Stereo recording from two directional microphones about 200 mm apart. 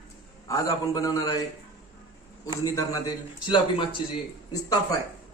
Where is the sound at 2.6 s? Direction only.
20° left (ahead or behind).